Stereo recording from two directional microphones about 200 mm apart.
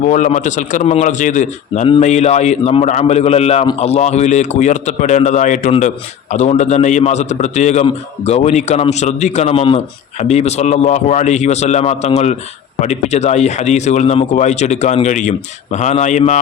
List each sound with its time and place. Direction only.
0.1 s a man's voice: 40° left (ahead or behind)